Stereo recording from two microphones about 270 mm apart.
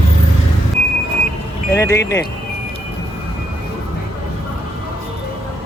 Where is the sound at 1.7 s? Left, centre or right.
Centre.